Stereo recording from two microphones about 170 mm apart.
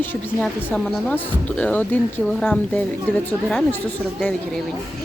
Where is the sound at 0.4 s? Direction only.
5° left (ahead or behind).